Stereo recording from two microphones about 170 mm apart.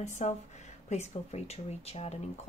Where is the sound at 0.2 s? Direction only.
40° left (ahead or behind).